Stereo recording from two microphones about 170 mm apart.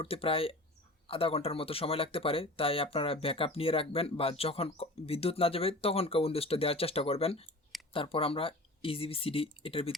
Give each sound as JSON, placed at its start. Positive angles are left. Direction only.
{"t": 0.0, "sound": "speech", "side_deg": 35}